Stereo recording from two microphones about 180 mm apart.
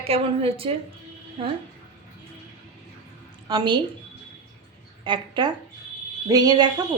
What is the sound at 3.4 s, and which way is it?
Speech, 25° right (ahead or behind).